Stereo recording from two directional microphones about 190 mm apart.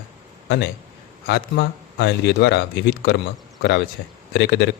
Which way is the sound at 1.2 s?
65° left (ahead or behind).